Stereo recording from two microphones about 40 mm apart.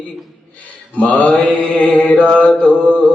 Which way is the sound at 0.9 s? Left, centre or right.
Left.